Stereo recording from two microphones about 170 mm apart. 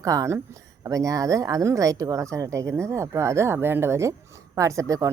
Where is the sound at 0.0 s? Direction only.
20° right (ahead or behind).